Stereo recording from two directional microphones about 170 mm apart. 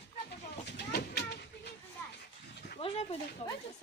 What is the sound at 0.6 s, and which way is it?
Vehicle, 70° left (ahead or behind).